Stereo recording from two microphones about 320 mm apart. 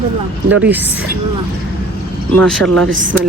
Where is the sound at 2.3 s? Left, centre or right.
Centre.